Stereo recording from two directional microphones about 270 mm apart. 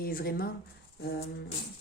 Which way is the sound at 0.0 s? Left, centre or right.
Left.